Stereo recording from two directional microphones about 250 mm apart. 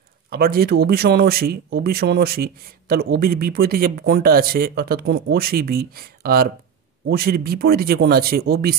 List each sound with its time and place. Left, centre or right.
0.3 s speech: right